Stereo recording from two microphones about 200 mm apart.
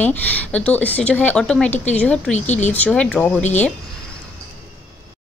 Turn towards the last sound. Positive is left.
turn(degrees=10)  # may be behind; listen again after turning